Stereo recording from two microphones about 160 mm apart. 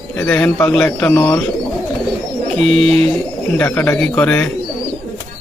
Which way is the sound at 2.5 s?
40° right (ahead or behind).